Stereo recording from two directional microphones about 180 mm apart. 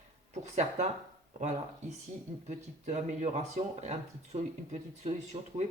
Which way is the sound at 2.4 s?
40° right (ahead or behind).